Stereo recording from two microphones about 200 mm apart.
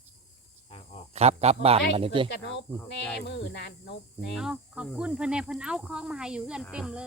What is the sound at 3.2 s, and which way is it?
Speech, 55° left (ahead or behind).